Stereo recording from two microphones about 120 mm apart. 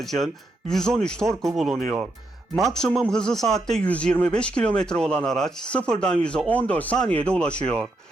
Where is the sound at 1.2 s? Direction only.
25° right (ahead or behind).